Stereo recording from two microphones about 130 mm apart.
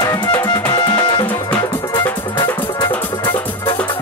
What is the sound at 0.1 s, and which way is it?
Music, 30° left (ahead or behind).